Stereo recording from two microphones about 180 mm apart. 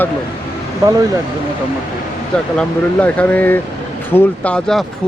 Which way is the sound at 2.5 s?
5° left (ahead or behind).